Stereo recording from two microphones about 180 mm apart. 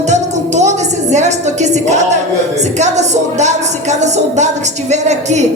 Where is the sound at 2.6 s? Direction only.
40° right (ahead or behind).